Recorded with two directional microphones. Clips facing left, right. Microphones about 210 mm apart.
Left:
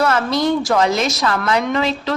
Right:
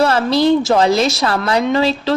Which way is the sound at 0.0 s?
30° right (ahead or behind).